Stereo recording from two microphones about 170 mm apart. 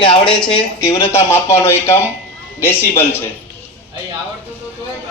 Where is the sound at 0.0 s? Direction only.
30° left (ahead or behind).